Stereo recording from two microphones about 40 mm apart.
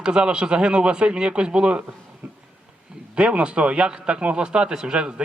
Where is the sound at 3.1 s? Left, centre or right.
Right.